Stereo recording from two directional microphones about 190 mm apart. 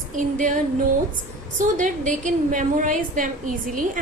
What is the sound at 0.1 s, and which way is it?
A woman's voice, 40° right (ahead or behind).